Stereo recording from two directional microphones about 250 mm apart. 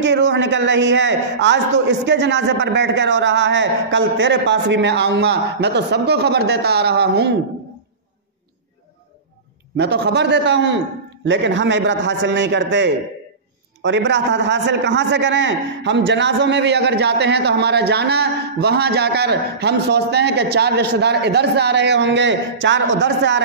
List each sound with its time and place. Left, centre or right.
0.0 s a man's voice: right
9.8 s a man's voice: right